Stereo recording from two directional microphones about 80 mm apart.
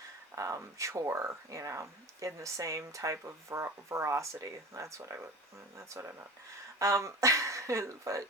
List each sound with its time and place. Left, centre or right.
0.3 s speech: right